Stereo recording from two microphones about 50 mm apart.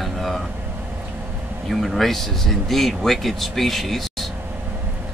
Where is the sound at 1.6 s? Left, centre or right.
Centre.